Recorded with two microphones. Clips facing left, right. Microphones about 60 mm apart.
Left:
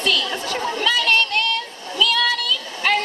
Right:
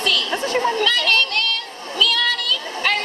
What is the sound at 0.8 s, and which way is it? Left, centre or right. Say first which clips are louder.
Child singing: even; centre.